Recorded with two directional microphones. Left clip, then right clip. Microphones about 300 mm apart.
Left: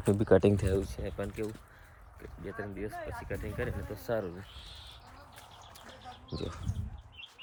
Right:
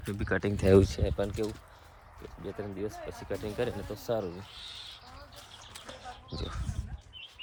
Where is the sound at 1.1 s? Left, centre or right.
Centre.